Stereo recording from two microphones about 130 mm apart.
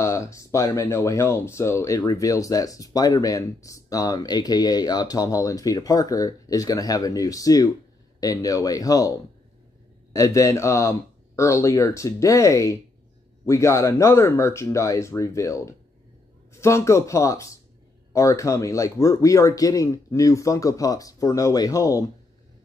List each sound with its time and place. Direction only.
0.0 s speech: 25° left (ahead or behind)
10.1 s speech: 25° left (ahead or behind)